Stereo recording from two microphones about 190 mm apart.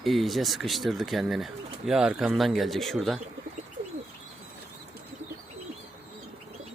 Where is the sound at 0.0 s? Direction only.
Centre (ahead or behind).